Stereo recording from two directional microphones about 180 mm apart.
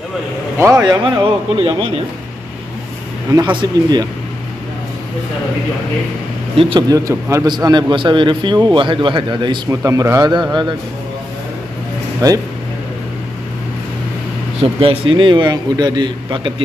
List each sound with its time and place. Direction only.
0.6 s speech: 15° right (ahead or behind)
1.0 s a man's voice: 30° right (ahead or behind)
3.3 s a man's voice: 20° right (ahead or behind)
6.5 s a man's voice: 30° right (ahead or behind)
12.2 s a man's voice: 20° right (ahead or behind)
14.6 s a man's voice: 30° right (ahead or behind)